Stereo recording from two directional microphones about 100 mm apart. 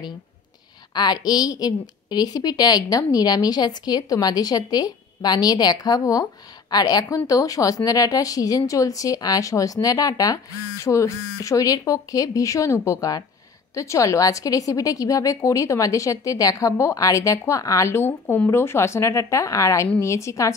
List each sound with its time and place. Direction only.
0.9 s a woman's voice: 45° left (ahead or behind)